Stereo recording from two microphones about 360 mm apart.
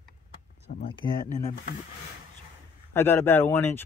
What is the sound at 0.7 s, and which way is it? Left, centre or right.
Speech, centre.